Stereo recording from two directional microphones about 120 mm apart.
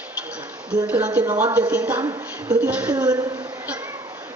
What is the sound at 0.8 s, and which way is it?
A woman's voice, 15° right (ahead or behind).